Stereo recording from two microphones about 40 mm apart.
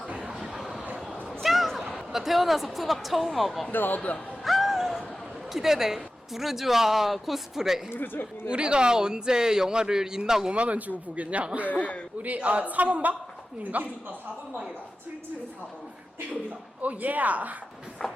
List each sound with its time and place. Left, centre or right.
0.3 s vehicle: centre
1.5 s a sound: centre
2.7 s speech: centre
3.7 s speech: left
4.4 s a sound: centre
5.5 s speech: centre
7.9 s speech: left
8.4 s speech: right
10.5 s a man's voice: right
16.8 s speech: right
18.0 s walk: centre